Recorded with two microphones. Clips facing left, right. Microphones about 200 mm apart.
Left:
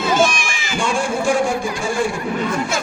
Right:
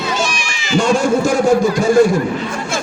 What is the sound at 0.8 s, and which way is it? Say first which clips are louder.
A man's voice: right 7 dB; 40° right (ahead or behind).